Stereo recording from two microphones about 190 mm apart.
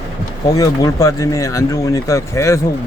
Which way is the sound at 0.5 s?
20° left (ahead or behind).